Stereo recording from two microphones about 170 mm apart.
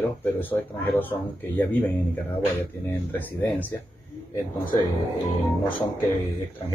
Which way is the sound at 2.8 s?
10° left (ahead or behind).